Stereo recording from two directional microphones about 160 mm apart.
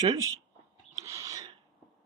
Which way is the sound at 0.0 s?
20° right (ahead or behind).